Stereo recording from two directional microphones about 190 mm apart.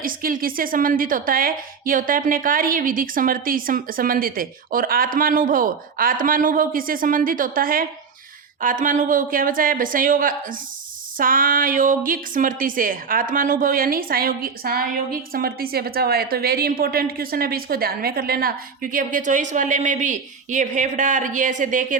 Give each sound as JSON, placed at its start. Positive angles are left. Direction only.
{"t": 0.0, "sound": "a woman's voice", "side_deg": -50}